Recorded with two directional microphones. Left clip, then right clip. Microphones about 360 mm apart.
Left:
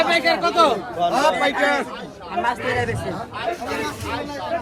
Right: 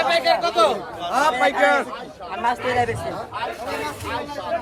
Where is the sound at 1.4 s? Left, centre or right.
Centre.